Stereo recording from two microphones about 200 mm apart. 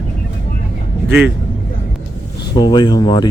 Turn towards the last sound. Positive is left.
turn(degrees=20)  # may be behind; listen again after turning